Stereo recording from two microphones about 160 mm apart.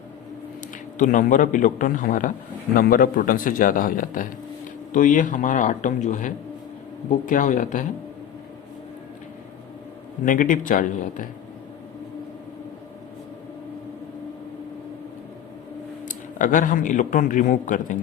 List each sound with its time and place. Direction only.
0.9 s a man's voice: 50° left (ahead or behind)
10.2 s a man's voice: 55° left (ahead or behind)
16.0 s speech: 55° left (ahead or behind)